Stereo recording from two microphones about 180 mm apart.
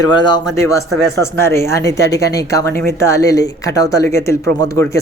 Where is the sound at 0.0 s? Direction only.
25° left (ahead or behind).